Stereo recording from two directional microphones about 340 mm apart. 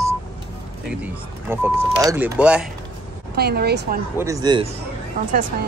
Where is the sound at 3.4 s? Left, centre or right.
Right.